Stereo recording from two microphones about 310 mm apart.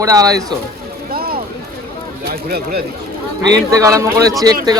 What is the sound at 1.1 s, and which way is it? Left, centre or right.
Run, right.